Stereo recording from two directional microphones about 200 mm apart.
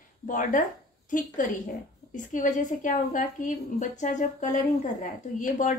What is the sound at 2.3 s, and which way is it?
A woman's voice, 40° left (ahead or behind).